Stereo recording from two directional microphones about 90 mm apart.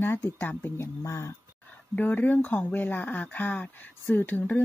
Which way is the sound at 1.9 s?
20° left (ahead or behind).